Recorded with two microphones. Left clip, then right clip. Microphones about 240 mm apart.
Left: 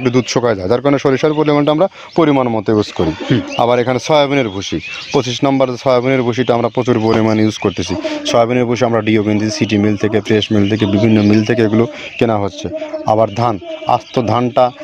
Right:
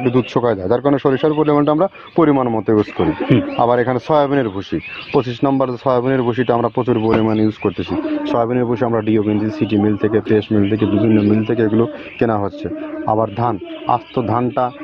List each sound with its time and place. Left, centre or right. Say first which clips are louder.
0.0 s speech: left 2 dB; left